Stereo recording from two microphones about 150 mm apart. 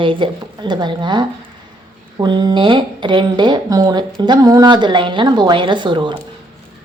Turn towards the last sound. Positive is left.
turn(degrees=-30)  # may be behind; listen again after turning